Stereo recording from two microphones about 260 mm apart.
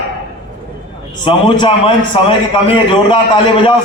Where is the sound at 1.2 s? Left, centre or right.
Centre.